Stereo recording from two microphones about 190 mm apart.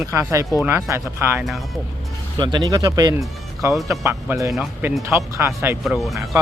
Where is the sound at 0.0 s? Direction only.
15° right (ahead or behind).